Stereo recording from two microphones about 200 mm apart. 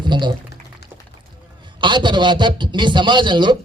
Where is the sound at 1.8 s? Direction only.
25° right (ahead or behind).